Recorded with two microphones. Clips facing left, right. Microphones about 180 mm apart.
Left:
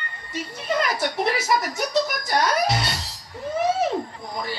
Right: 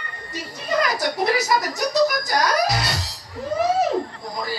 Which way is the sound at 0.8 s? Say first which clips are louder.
Right 2 dB; 25° left (ahead or behind).